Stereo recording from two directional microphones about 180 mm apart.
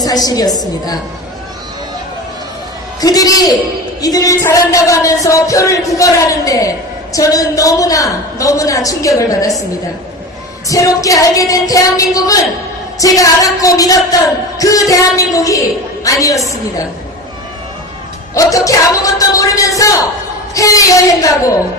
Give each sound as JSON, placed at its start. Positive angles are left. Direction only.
{"t": 0.0, "sound": "a man's voice", "side_deg": 20}
{"t": 3.0, "sound": "a man's voice", "side_deg": 20}
{"t": 10.7, "sound": "a man's voice", "side_deg": 20}
{"t": 18.3, "sound": "a man's voice", "side_deg": 20}